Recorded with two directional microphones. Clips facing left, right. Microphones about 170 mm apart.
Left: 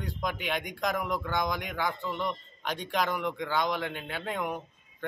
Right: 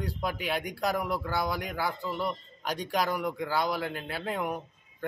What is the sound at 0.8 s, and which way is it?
Speech, 35° right (ahead or behind).